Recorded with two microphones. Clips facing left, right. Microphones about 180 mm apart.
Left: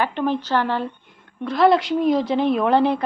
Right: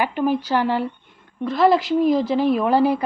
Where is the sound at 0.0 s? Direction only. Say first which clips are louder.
Right 1 dB; 10° right (ahead or behind).